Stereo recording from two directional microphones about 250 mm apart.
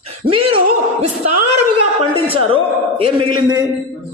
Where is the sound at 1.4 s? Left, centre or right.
Right.